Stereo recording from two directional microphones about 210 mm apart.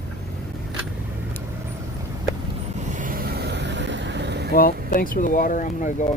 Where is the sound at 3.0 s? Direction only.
40° right (ahead or behind).